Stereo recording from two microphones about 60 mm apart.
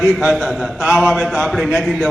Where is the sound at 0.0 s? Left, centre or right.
Centre.